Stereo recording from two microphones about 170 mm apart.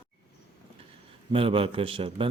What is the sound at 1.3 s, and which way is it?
Speech, 30° right (ahead or behind).